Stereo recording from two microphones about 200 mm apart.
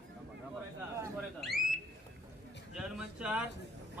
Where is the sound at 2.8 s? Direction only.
5° right (ahead or behind).